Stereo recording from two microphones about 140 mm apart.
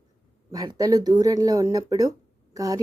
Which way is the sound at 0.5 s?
25° right (ahead or behind).